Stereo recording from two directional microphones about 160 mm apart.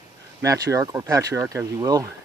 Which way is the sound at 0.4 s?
20° right (ahead or behind).